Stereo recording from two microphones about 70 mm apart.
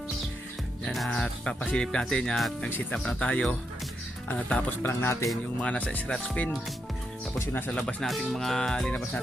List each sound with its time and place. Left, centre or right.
0.9 s music: centre
1.1 s speech: centre
4.8 s speech: left
5.5 s speech: centre
7.8 s speech: left
8.0 s music: centre